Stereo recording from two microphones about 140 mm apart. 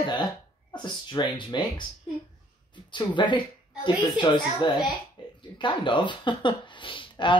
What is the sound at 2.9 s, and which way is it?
Speech, 35° left (ahead or behind).